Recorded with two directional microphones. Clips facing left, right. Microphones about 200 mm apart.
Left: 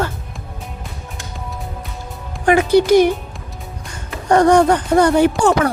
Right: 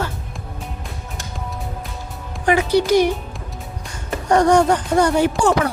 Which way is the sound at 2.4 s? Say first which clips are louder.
Left 4 dB; 50° left (ahead or behind).